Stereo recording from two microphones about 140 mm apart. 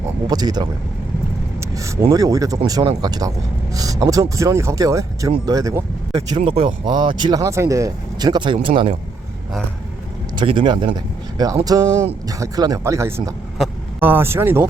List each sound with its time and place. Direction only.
0.3 s speech: 30° right (ahead or behind)
6.1 s speech: 40° right (ahead or behind)
10.3 s speech: 35° right (ahead or behind); by 14.7 s 15° right (ahead or behind)